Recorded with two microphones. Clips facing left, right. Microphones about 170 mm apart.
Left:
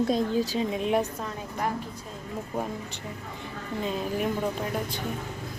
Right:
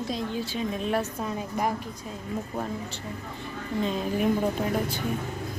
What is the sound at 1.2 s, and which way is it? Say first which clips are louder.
Speech: right 3 dB; 10° right (ahead or behind).